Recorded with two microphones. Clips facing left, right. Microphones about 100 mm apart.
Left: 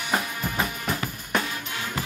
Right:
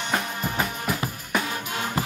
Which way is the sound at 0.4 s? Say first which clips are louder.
Right 1 dB; 5° right (ahead or behind).